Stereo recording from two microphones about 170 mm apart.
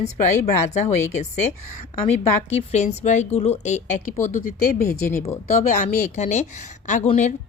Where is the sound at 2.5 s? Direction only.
40° left (ahead or behind).